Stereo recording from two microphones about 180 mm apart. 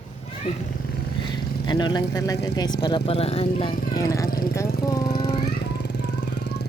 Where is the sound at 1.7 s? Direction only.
25° left (ahead or behind).